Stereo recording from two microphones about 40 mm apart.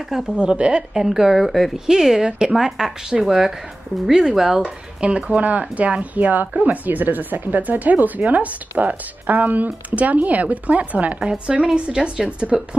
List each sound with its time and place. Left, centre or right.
0.4 s speech: right
0.9 s speech: centre
4.6 s speech: right
6.1 s speech: right
11.3 s speech: right